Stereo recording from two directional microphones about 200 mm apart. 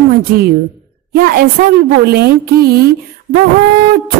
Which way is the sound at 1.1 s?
45° right (ahead or behind).